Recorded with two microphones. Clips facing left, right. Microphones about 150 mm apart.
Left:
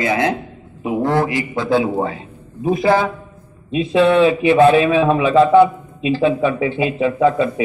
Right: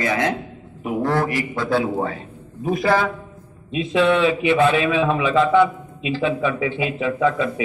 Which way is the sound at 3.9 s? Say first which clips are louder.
Left 4 dB; 35° left (ahead or behind).